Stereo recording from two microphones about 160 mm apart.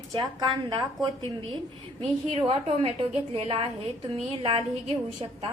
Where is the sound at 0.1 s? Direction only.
25° right (ahead or behind).